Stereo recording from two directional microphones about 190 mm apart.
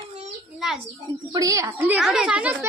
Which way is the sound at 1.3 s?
20° right (ahead or behind).